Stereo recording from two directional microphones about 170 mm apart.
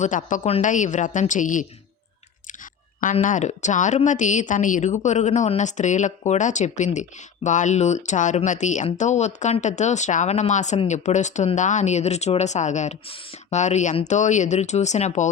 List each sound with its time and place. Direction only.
0.0 s speech: 50° left (ahead or behind)
3.0 s speech: 50° left (ahead or behind)